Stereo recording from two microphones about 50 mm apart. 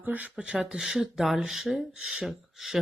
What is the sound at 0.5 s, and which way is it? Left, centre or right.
Speech, centre.